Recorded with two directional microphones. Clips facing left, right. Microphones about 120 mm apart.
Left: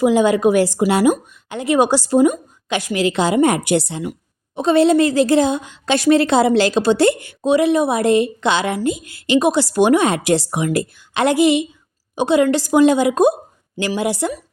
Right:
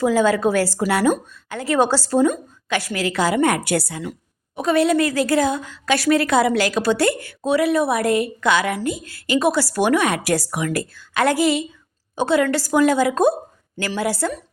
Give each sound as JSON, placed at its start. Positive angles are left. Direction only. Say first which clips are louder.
{"t": 0.0, "sound": "a woman's voice", "louder": "left 3 dB", "side_deg": 20}